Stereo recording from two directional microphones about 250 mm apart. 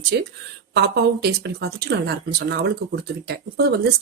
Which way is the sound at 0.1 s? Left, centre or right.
Right.